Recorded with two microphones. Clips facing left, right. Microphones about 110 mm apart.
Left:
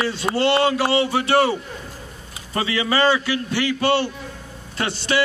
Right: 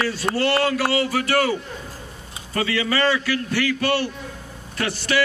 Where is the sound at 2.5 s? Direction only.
30° left (ahead or behind).